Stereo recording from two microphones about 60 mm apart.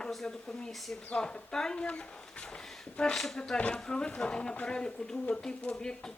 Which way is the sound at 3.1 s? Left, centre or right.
Centre.